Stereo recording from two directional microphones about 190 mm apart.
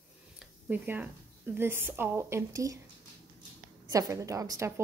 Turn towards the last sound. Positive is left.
turn(degrees=-15)  # may be behind; listen again after turning